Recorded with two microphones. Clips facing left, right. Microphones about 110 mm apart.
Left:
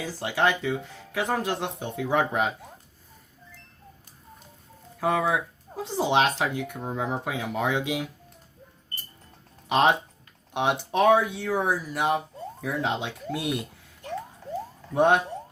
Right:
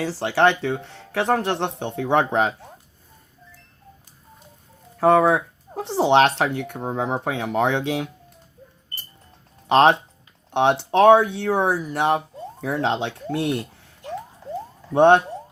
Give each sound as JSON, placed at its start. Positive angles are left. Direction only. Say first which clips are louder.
{"t": 0.0, "sound": "speech", "louder": "right 6 dB", "side_deg": -75}
{"t": 4.9, "sound": "speech", "louder": "right 8 dB", "side_deg": -65}
{"t": 9.6, "sound": "speech", "louder": "right 6 dB", "side_deg": -65}
{"t": 14.9, "sound": "speech", "louder": "right 6 dB", "side_deg": -65}